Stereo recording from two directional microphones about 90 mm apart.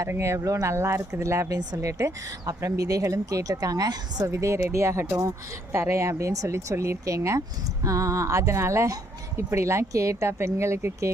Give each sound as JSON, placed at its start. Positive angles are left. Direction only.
{"t": 0.0, "sound": "a woman's voice", "side_deg": -35}